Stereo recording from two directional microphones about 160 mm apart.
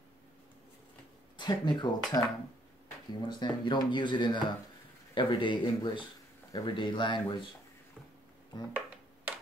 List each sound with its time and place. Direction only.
1.3 s speech: 25° left (ahead or behind)
8.7 s finger snapping: 10° right (ahead or behind)